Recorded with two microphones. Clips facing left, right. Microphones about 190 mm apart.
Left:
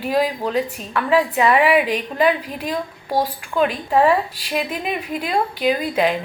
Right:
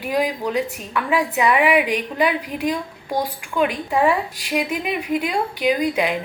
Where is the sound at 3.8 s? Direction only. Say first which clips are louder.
Left 4 dB; 35° left (ahead or behind).